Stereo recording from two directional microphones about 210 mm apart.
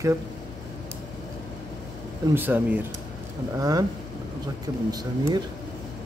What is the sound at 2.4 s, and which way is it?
Speech, 10° right (ahead or behind).